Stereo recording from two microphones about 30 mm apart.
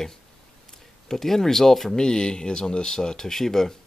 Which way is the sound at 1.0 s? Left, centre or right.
Centre.